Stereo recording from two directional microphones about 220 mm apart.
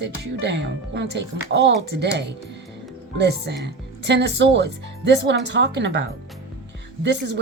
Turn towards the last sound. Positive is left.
turn(degrees=-55)  # may be behind; listen again after turning